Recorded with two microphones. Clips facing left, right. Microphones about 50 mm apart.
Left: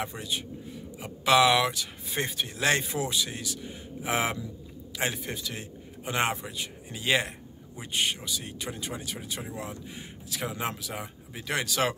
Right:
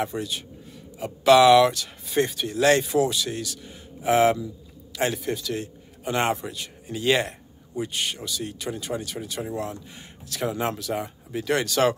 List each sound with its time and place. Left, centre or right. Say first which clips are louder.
0.0 s a man's voice: right 5 dB; centre